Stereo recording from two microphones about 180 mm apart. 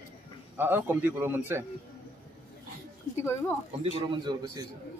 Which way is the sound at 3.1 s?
15° left (ahead or behind).